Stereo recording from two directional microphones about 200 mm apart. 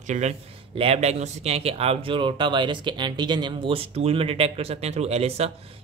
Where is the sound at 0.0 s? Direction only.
35° right (ahead or behind).